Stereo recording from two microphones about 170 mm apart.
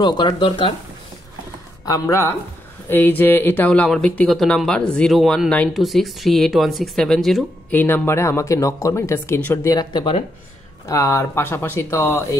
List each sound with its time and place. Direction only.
0.0 s speech: 30° left (ahead or behind)
1.9 s speech: 15° left (ahead or behind); by 7.8 s centre (ahead or behind)
7.8 s speech: 10° left (ahead or behind)